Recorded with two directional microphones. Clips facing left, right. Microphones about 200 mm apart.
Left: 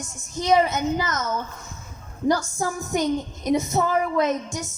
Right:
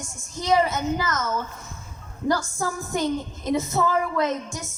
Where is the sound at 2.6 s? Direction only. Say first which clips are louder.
Left 2 dB; 20° left (ahead or behind).